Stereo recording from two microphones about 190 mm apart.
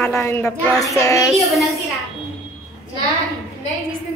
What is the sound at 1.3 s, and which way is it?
Speech, centre (ahead or behind).